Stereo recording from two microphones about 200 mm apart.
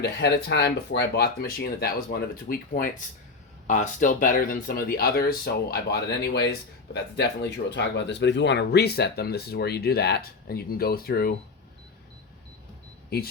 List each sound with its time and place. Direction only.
0.0 s speech: 55° left (ahead or behind)
13.1 s speech: 50° left (ahead or behind)